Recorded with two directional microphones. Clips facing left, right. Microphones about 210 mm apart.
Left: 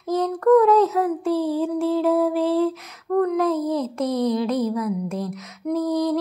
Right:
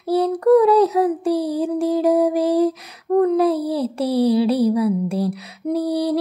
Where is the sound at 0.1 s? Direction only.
15° right (ahead or behind).